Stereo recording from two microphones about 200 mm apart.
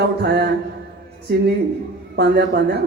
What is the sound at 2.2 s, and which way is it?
Speech, 55° right (ahead or behind).